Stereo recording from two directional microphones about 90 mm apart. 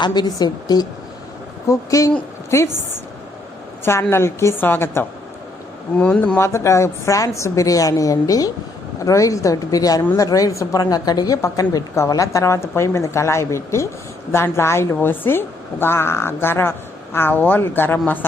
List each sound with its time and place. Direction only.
0.0 s a woman's voice: 55° left (ahead or behind)
2.5 s a woman's voice: 30° left (ahead or behind)
4.1 s a woman's voice: 30° left (ahead or behind)
6.0 s speech: 15° left (ahead or behind)
6.4 s a woman's voice: 30° left (ahead or behind)